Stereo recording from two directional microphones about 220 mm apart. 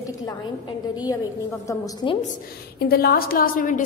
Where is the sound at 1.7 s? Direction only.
20° left (ahead or behind).